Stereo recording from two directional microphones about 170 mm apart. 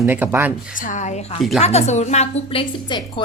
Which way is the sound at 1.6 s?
40° left (ahead or behind).